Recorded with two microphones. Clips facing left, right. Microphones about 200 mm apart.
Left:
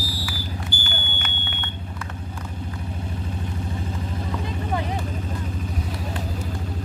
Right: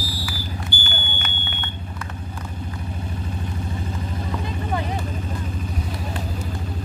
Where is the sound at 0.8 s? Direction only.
40° right (ahead or behind).